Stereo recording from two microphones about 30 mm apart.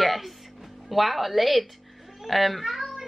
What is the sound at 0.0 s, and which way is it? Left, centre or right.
Music, centre.